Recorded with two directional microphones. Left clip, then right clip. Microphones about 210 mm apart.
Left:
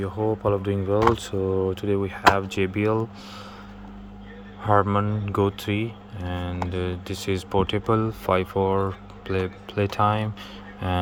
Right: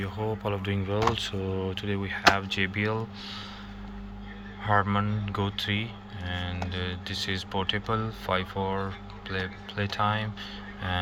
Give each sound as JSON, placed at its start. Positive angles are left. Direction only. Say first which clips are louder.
{"t": 0.0, "sound": "speech", "louder": "left 7 dB", "side_deg": 40}
{"t": 4.6, "sound": "speech", "louder": "left 5 dB", "side_deg": 45}